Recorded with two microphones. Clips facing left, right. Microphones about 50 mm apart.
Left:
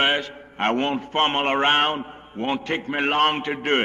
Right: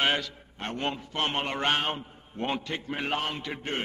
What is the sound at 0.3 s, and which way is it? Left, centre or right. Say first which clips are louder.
Mantra: left 14 dB; left.